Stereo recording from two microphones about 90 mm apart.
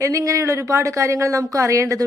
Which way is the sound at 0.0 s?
35° right (ahead or behind).